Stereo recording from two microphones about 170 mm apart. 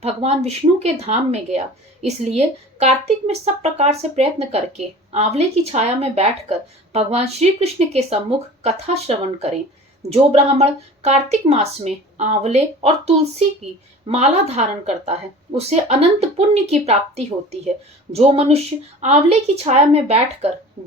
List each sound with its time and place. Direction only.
0.0 s speech: 35° right (ahead or behind)